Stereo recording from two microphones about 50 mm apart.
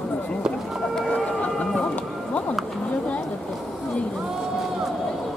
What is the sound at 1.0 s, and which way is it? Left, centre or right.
Run, centre.